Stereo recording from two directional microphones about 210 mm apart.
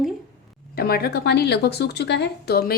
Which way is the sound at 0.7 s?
50° left (ahead or behind).